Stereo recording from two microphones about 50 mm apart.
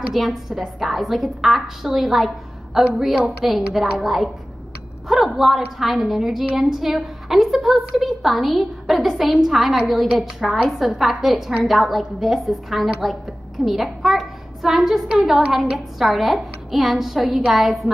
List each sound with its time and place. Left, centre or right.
0.1 s a woman's voice: centre